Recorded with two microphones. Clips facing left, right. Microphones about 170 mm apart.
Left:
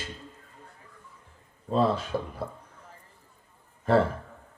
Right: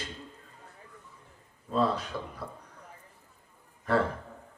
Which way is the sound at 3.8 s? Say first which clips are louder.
Left 5 dB; 25° left (ahead or behind).